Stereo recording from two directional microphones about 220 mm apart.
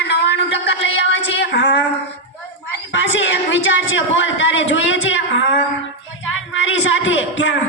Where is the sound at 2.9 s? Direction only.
55° left (ahead or behind).